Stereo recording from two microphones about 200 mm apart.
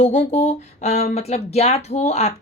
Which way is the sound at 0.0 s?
35° left (ahead or behind).